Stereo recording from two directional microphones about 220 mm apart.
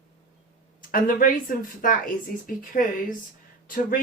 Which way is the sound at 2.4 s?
40° left (ahead or behind).